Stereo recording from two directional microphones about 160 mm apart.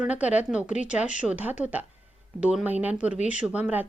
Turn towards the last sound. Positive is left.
turn(degrees=-10)  # may be behind; listen again after turning